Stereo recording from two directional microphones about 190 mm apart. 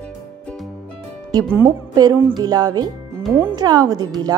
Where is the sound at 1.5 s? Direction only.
15° right (ahead or behind).